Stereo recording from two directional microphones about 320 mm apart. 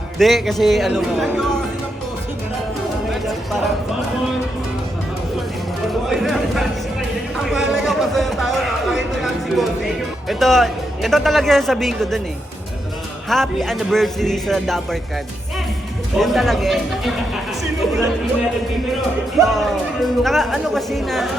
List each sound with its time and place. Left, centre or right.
0.2 s speech: centre
3.1 s a sound: centre
5.9 s speech: centre
7.3 s a sound: centre
9.2 s speech: centre
13.2 s speech: centre
16.1 s speech: centre
19.4 s speech: centre